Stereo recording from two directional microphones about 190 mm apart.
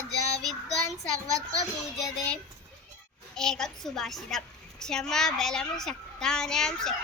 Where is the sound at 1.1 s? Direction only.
15° right (ahead or behind).